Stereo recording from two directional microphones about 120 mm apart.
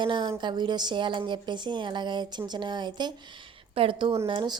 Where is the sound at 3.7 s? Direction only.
50° right (ahead or behind).